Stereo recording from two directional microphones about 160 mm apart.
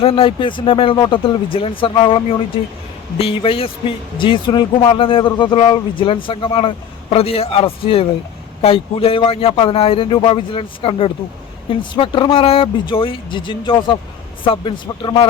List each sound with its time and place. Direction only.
0.0 s speech: 35° left (ahead or behind)